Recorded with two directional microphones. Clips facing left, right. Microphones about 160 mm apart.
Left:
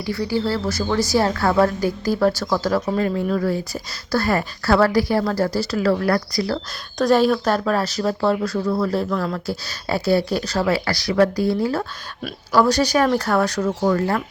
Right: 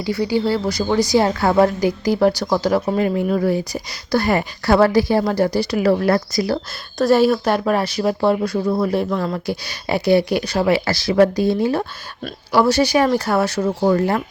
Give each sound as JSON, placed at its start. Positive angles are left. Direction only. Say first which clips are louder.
{"t": 0.0, "sound": "speech", "louder": "right 3 dB", "side_deg": -20}
{"t": 7.0, "sound": "speech", "louder": "right 2 dB", "side_deg": -5}
{"t": 10.7, "sound": "speech", "louder": "right 3 dB", "side_deg": -25}
{"t": 12.5, "sound": "speech", "louder": "right 2 dB", "side_deg": -10}